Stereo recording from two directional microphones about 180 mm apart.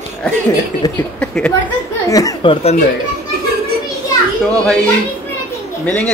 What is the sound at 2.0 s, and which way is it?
Speech, 20° left (ahead or behind).